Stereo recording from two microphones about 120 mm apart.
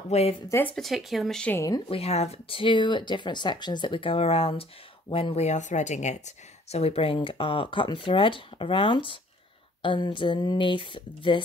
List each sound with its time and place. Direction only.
0.1 s speech: 60° left (ahead or behind)
0.5 s speech: 20° left (ahead or behind)
0.7 s speech: centre (ahead or behind)
1.5 s speech: 25° left (ahead or behind)
1.9 s speech: 55° left (ahead or behind)